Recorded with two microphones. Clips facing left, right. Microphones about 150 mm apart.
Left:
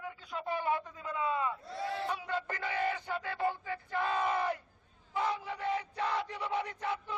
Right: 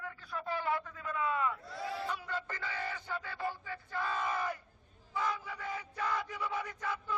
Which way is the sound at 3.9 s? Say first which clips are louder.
Left 4 dB; 25° left (ahead or behind).